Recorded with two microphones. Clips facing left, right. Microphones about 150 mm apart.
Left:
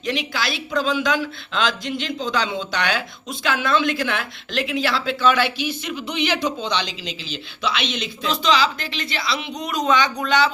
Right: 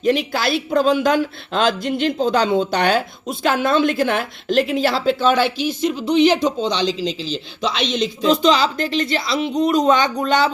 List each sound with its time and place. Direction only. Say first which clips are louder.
0.0 s speech: right 7 dB; 50° right (ahead or behind)
9.5 s a man's voice: right 11 dB; 25° right (ahead or behind)
9.7 s speech: even; 45° right (ahead or behind)